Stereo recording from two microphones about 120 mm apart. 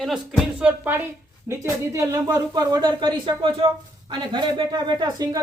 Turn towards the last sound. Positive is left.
turn(degrees=-35)  # may be behind; listen again after turning